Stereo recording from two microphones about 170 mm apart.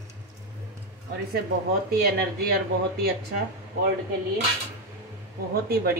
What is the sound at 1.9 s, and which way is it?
Speech, 65° right (ahead or behind).